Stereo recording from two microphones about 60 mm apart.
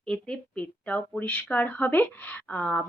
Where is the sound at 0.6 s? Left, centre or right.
Left.